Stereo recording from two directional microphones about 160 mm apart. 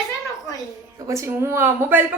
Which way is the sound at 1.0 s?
20° right (ahead or behind).